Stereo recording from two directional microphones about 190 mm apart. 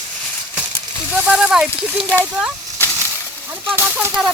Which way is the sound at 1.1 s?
5° right (ahead or behind).